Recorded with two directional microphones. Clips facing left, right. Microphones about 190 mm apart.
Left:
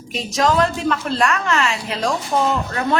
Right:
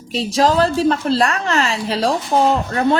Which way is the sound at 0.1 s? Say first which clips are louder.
Right 3 dB; 30° right (ahead or behind).